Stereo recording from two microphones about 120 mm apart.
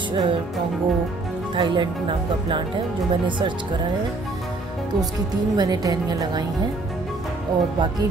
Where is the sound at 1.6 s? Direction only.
40° right (ahead or behind).